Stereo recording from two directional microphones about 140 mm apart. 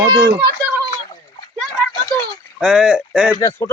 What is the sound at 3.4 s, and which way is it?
Speech, 20° left (ahead or behind).